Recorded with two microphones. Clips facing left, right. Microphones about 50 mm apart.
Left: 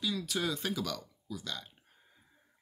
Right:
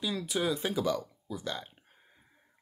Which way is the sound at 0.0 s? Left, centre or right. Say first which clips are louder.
Right 3 dB; right.